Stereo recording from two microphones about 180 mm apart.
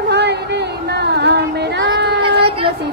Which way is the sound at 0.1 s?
70° right (ahead or behind).